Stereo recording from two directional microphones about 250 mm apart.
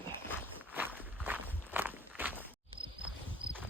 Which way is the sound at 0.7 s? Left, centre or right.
Centre.